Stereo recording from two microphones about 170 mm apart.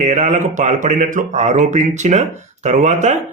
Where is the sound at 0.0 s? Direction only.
45° right (ahead or behind).